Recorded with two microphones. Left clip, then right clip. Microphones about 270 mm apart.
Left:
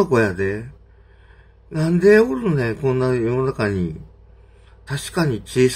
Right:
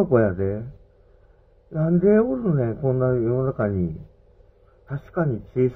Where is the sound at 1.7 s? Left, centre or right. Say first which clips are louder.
Left 5 dB; left.